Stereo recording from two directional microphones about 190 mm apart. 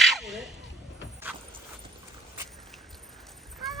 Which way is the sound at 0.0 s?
Centre (ahead or behind).